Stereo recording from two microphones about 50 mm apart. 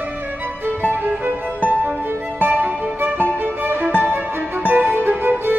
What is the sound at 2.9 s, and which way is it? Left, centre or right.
Music, right.